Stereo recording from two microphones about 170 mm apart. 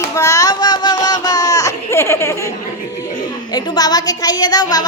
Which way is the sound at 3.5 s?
25° left (ahead or behind).